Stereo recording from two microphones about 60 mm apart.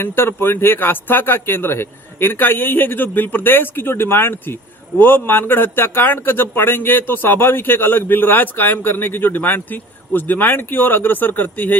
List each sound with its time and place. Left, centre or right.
0.0 s speech: left